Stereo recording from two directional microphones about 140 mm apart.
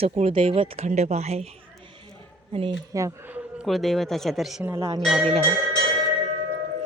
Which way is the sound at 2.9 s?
20° right (ahead or behind).